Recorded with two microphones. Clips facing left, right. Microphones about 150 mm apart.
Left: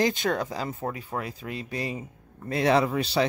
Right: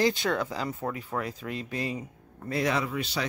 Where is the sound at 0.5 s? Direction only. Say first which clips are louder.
Left 1 dB; 30° left (ahead or behind).